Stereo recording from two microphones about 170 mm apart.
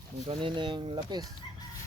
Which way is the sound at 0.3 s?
30° right (ahead or behind).